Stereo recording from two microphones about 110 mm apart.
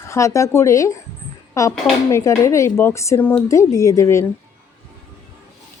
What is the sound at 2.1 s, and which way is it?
Speech, 30° left (ahead or behind).